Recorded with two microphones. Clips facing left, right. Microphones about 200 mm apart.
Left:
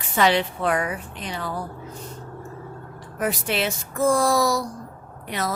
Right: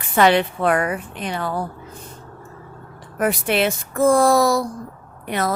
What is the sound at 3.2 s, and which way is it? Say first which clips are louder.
A woman's voice: right 5 dB; 60° right (ahead or behind).